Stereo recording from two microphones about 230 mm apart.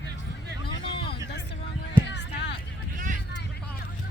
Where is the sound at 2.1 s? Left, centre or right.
Left.